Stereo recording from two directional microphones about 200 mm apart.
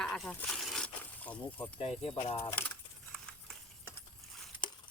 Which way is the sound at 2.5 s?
10° left (ahead or behind).